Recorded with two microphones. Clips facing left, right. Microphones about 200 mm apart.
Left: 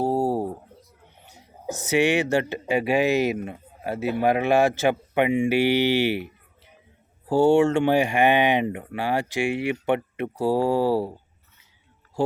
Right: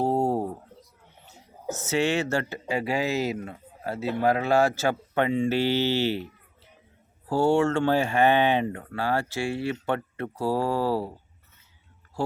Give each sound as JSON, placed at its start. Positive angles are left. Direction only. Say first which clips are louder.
{"t": 0.0, "sound": "a sound", "louder": "left 1 dB", "side_deg": 5}
{"t": 1.2, "sound": "speech", "louder": "left 1 dB", "side_deg": 15}
{"t": 12.2, "sound": "speech", "louder": "left 5 dB", "side_deg": 15}